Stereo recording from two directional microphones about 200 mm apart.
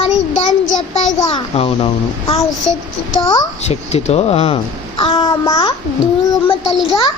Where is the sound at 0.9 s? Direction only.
30° left (ahead or behind).